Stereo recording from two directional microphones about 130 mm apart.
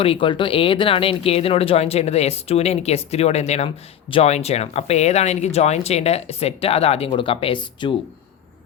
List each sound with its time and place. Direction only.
0.0 s speech: 40° left (ahead or behind)